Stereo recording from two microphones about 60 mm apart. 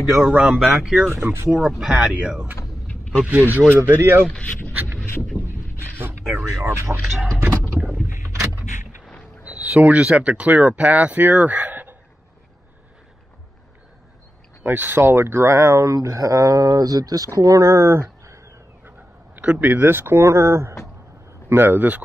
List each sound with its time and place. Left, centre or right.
0.0 s speech: centre
1.1 s speech: right
1.8 s speech: centre
3.3 s speech: right
3.7 s speech: right
5.4 s a sound: right
6.6 s speech: right
7.4 s vehicle: right
8.1 s vehicle: right
9.4 s speech: right
14.6 s speech: right
19.4 s speech: right
21.5 s speech: right